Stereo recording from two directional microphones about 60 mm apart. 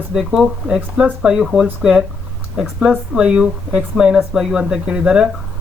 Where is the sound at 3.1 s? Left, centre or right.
Centre.